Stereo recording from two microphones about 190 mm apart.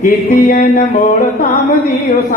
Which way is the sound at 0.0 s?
45° left (ahead or behind).